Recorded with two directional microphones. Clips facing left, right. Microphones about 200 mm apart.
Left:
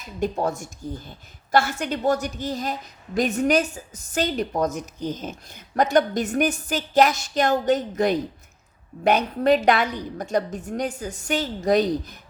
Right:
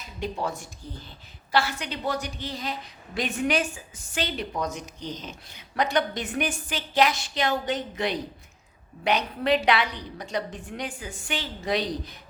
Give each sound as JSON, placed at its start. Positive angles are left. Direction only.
{"t": 0.2, "sound": "a woman's voice", "side_deg": 45}